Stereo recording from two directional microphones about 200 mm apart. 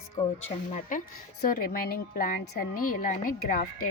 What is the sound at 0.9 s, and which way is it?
A woman's voice, 40° left (ahead or behind).